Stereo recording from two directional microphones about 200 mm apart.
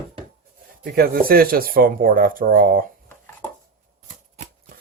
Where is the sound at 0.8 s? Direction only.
50° right (ahead or behind).